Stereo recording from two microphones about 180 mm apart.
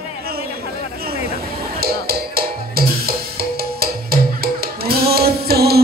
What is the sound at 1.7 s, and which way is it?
Music, 60° right (ahead or behind).